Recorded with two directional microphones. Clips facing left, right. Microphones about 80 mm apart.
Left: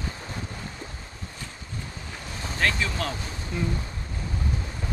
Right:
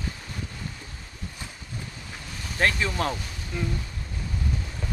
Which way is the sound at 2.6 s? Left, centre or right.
Right.